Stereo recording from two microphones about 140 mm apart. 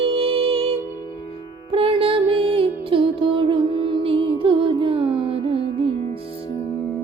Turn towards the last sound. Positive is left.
turn(degrees=-40)  # may be behind; listen again after turning